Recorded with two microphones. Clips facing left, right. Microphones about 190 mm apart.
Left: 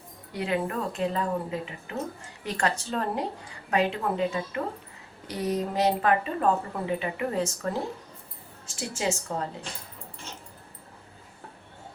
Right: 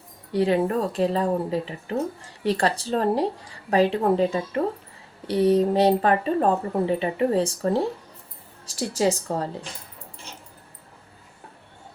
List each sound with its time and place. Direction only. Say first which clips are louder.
0.3 s speech: right 8 dB; 35° right (ahead or behind)